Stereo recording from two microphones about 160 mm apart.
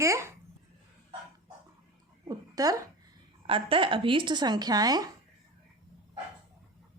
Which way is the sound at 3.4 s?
35° right (ahead or behind).